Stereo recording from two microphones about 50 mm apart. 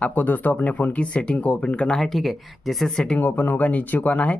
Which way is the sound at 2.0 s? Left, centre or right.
Centre.